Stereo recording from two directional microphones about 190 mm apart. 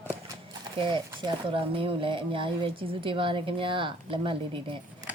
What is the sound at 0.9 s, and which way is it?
Speech, 25° right (ahead or behind).